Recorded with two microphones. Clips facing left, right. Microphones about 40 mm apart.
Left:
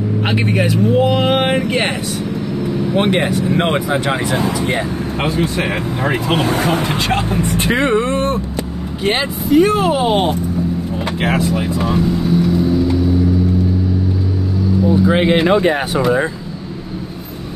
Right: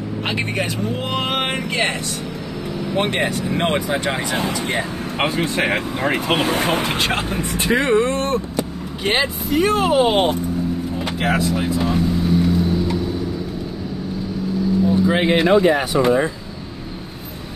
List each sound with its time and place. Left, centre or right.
0.2 s speech: centre
1.7 s speech: left
3.0 s speech: centre
5.2 s speech: right
5.9 s speech: centre
7.7 s speech: left
9.0 s speech: centre
11.2 s speech: left
15.0 s speech: centre
15.6 s speech: left